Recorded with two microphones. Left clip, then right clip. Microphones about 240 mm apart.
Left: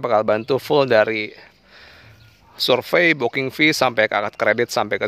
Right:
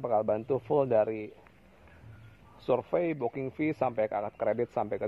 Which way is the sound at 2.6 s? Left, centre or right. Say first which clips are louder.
Left 12 dB; left.